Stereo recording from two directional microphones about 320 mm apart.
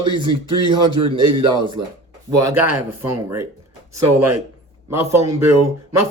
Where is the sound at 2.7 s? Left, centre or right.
Centre.